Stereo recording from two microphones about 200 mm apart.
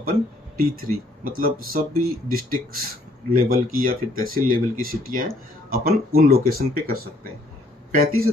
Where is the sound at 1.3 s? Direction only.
45° right (ahead or behind).